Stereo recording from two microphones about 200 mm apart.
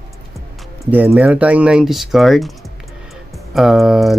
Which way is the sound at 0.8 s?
10° right (ahead or behind).